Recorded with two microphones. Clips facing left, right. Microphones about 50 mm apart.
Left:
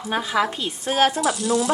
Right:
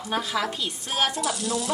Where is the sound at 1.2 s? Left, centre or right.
Centre.